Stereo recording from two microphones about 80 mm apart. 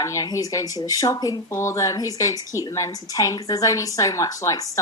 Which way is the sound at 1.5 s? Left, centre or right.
Left.